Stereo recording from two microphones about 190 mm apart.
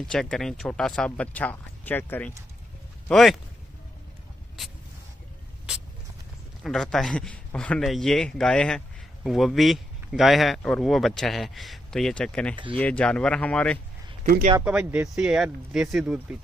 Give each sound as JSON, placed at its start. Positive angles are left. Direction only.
{"t": 0.1, "sound": "speech", "side_deg": 5}
{"t": 6.6, "sound": "speech", "side_deg": 0}
{"t": 14.2, "sound": "speech", "side_deg": -50}
{"t": 14.6, "sound": "speech", "side_deg": -5}